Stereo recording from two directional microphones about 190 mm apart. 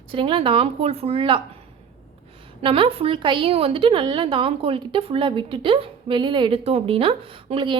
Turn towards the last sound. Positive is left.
turn(degrees=-30)  # may be behind; listen again after turning